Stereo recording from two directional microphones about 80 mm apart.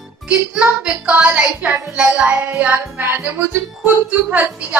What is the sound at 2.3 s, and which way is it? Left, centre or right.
Child singing, right.